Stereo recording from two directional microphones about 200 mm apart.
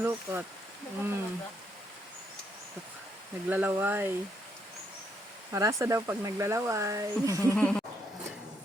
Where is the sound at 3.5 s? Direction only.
10° right (ahead or behind).